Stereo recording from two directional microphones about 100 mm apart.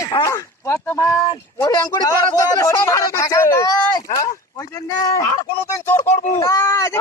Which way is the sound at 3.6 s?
35° left (ahead or behind).